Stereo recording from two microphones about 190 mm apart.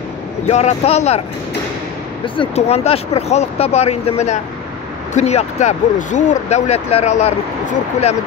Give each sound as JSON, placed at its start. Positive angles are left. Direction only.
{"t": 0.5, "sound": "speech", "side_deg": 35}
{"t": 2.2, "sound": "speech", "side_deg": 25}